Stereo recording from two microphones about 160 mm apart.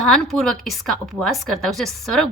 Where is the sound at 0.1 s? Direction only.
5° left (ahead or behind).